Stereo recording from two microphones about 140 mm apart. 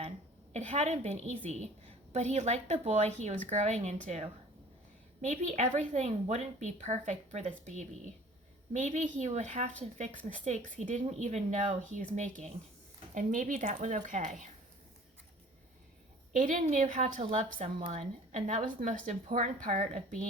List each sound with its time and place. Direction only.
0.5 s a woman's voice: 55° right (ahead or behind)
5.3 s a woman's voice: 60° right (ahead or behind)
10.2 s a woman's voice: 65° right (ahead or behind)
16.6 s a woman's voice: 60° right (ahead or behind)